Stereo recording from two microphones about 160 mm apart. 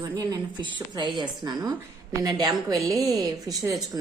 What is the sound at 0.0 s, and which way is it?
A woman's voice, 25° right (ahead or behind).